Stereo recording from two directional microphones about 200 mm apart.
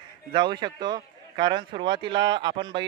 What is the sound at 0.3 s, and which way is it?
A man's voice, 20° right (ahead or behind).